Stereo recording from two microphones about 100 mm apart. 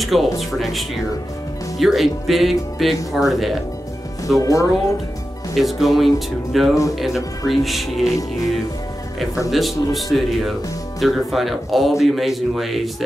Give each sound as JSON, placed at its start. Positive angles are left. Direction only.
{"t": 0.0, "sound": "speech", "side_deg": 0}
{"t": 4.4, "sound": "speech", "side_deg": 35}
{"t": 5.6, "sound": "speech", "side_deg": 0}
{"t": 9.5, "sound": "speech", "side_deg": 0}